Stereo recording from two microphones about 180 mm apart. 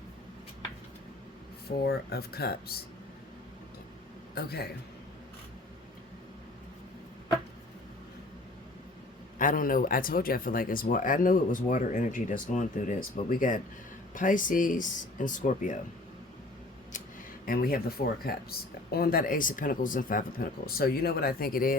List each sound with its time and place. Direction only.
1.7 s speech: 60° left (ahead or behind)
4.4 s speech: 60° left (ahead or behind)
9.4 s speech: 50° left (ahead or behind)
17.4 s speech: 55° left (ahead or behind)